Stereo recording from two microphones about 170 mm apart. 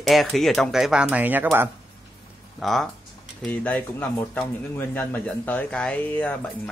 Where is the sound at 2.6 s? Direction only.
Centre (ahead or behind).